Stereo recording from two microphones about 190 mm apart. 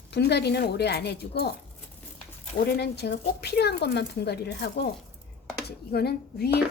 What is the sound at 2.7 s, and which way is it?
Speech, 55° left (ahead or behind).